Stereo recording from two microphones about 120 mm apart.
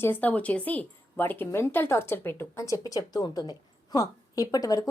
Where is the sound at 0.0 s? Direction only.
15° left (ahead or behind).